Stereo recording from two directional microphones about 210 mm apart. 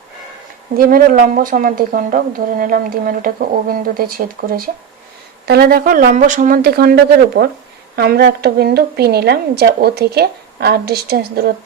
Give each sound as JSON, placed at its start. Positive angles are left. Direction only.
{"t": 0.8, "sound": "speech", "side_deg": -45}